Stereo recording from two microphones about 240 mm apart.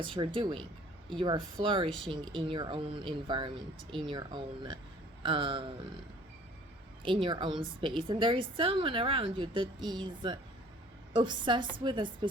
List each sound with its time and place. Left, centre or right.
0.0 s a woman's voice: right
7.0 s a woman's voice: centre